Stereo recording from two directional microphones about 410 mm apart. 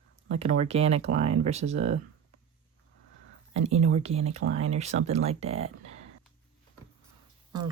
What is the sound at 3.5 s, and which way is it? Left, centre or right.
Speech, right.